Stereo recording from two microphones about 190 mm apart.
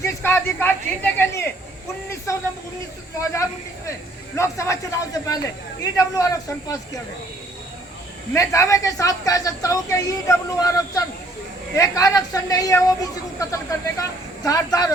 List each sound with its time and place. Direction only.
0.0 s a woman's voice: 15° left (ahead or behind)
4.4 s a woman's voice: 15° left (ahead or behind)
8.3 s a woman's voice: 15° left (ahead or behind)